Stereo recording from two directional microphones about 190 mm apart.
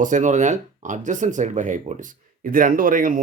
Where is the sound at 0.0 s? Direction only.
40° right (ahead or behind).